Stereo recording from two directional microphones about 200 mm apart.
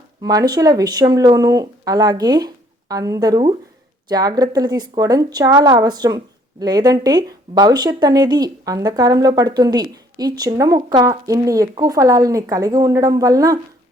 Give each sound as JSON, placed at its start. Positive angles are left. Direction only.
{"t": 0.2, "sound": "a woman's voice", "side_deg": -20}